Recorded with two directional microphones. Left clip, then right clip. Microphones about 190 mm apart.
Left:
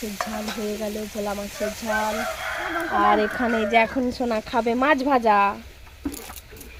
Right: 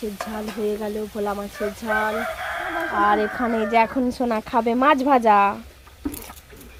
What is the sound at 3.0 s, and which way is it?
Speech, 5° left (ahead or behind).